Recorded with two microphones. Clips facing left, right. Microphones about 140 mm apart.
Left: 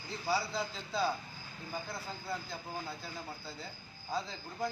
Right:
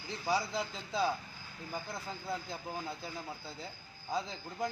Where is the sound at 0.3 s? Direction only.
20° right (ahead or behind).